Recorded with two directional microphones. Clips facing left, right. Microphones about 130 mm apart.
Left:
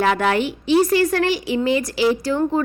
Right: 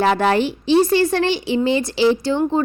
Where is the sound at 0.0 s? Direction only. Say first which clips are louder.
Right 2 dB; 30° right (ahead or behind).